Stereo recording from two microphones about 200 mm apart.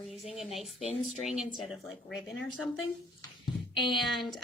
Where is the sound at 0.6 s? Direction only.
30° left (ahead or behind).